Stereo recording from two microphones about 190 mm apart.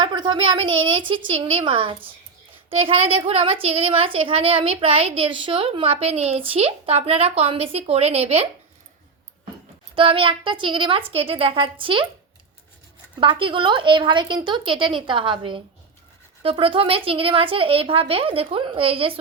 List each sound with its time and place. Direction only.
0.0 s a sound: 25° right (ahead or behind)
0.9 s a woman's voice: 25° right (ahead or behind)
9.9 s speech: 25° right (ahead or behind)
13.1 s speech: 25° right (ahead or behind)